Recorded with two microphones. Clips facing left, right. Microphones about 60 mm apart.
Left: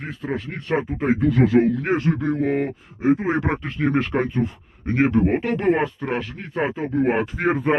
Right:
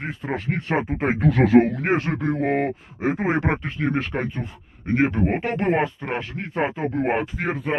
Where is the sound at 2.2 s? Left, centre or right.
Right.